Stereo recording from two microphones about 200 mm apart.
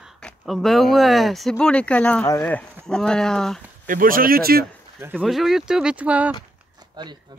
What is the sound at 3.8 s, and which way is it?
Speech, 45° right (ahead or behind).